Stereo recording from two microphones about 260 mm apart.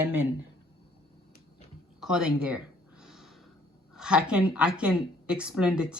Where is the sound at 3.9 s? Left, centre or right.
Centre.